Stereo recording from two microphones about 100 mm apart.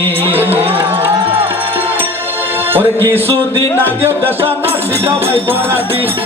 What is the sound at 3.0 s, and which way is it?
Music, 20° left (ahead or behind).